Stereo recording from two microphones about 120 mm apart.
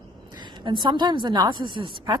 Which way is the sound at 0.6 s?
40° right (ahead or behind).